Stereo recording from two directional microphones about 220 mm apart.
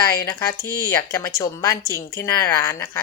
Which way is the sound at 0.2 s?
15° left (ahead or behind).